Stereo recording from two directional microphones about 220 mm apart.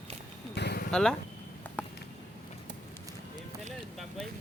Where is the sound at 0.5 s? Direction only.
45° left (ahead or behind).